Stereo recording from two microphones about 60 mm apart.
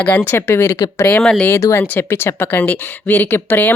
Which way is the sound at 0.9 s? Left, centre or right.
Left.